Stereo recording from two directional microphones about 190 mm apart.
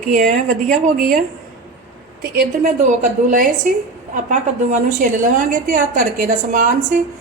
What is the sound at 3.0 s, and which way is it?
A woman's voice, 45° right (ahead or behind).